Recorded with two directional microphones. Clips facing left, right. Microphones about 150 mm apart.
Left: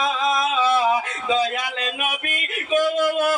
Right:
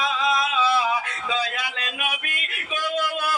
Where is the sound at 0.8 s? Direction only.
20° left (ahead or behind).